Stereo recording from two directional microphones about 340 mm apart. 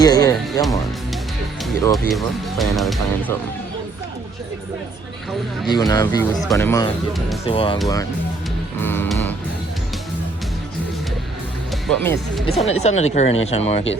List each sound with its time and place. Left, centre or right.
0.0 s music: centre
1.8 s speech: centre
5.6 s speech: centre
7.4 s speech: centre
8.8 s music: centre
11.9 s speech: centre
12.5 s speech: centre